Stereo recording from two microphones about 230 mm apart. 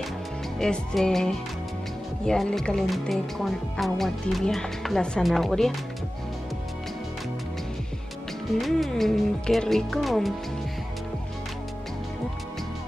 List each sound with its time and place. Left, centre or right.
0.6 s speech: centre
8.5 s speech: centre